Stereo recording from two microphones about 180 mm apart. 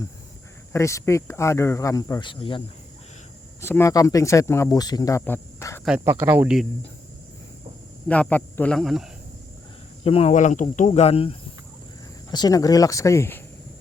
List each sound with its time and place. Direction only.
0.7 s speech: 15° left (ahead or behind)
3.6 s speech: 15° left (ahead or behind)
6.1 s speech: 10° right (ahead or behind)
8.0 s speech: 5° left (ahead or behind)
10.0 s speech: 30° left (ahead or behind)
12.3 s speech: 20° left (ahead or behind)